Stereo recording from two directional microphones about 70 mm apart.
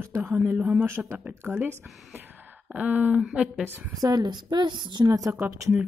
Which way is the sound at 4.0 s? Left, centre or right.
Right.